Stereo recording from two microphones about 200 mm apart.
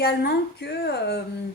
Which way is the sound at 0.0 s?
50° left (ahead or behind).